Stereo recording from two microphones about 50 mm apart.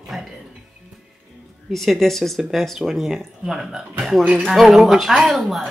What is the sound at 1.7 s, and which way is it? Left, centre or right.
Speech, centre.